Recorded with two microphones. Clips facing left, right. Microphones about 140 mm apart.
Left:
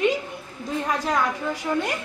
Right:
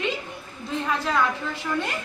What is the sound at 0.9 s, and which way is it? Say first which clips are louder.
Speech: even; 40° left (ahead or behind).